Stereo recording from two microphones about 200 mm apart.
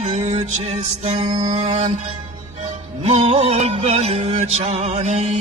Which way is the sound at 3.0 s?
30° right (ahead or behind).